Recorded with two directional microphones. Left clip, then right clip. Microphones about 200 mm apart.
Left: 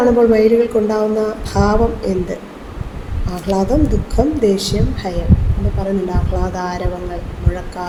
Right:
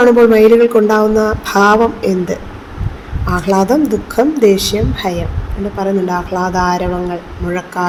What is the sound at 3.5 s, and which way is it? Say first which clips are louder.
A woman's voice: right 4 dB; 35° right (ahead or behind).